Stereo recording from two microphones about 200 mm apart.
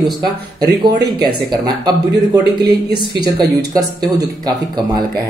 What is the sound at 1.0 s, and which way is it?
Speech, 55° right (ahead or behind).